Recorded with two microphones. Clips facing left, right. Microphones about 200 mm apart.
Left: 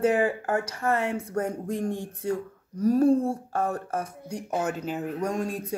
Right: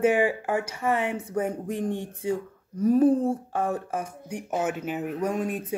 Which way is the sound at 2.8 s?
5° right (ahead or behind).